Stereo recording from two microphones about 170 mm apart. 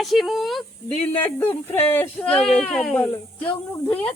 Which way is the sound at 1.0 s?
15° left (ahead or behind).